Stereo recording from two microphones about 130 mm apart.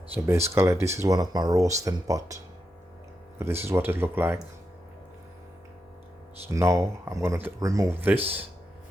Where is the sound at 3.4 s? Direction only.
20° right (ahead or behind).